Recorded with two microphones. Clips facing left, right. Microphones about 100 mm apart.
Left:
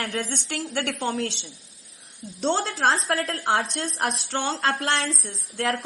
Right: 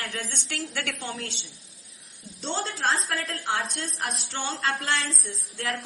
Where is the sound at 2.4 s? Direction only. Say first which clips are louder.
Left 7 dB; 40° left (ahead or behind).